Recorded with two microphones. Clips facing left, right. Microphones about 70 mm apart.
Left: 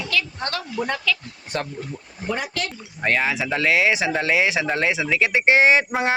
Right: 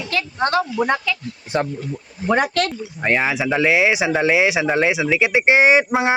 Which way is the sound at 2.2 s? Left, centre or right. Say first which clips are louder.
Right 8 dB; right.